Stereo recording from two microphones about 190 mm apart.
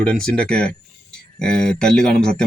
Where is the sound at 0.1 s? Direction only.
5° left (ahead or behind).